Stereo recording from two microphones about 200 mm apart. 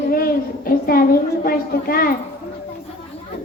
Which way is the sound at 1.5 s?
45° left (ahead or behind).